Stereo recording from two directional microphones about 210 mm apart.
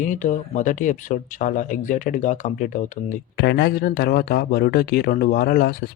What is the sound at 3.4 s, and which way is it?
Speech, 50° left (ahead or behind).